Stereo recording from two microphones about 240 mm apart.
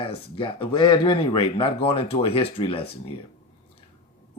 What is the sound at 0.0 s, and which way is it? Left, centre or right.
Speech, left.